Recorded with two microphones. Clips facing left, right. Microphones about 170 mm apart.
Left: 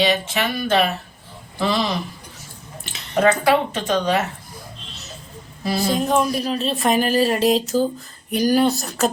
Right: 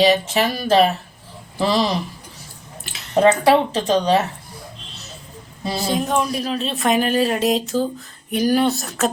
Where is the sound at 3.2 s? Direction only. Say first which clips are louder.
Right 2 dB; 30° right (ahead or behind).